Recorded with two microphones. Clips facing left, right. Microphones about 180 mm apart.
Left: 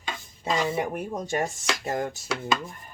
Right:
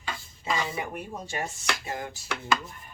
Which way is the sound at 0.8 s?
45° left (ahead or behind).